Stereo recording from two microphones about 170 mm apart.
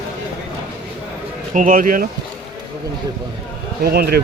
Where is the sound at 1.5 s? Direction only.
50° right (ahead or behind).